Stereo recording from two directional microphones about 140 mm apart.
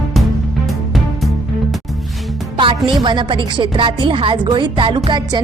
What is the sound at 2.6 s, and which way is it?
Music, 35° right (ahead or behind).